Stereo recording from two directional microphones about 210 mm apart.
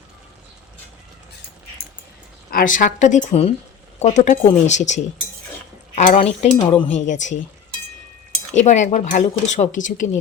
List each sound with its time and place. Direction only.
2.5 s speech: 40° left (ahead or behind)
6.0 s speech: 30° left (ahead or behind)
8.5 s speech: 35° left (ahead or behind)